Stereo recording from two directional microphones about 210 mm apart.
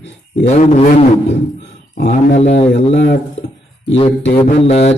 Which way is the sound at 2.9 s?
60° left (ahead or behind).